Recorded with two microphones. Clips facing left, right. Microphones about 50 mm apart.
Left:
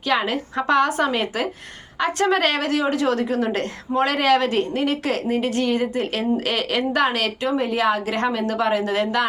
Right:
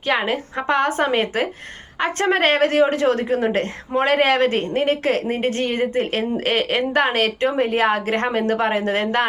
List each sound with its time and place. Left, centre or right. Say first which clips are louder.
0.1 s a woman's voice: right 1 dB; right